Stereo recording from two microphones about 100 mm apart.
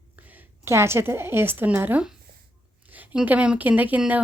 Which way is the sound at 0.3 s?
20° right (ahead or behind).